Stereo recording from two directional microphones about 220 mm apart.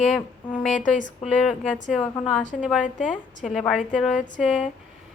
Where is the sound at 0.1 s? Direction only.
Centre (ahead or behind).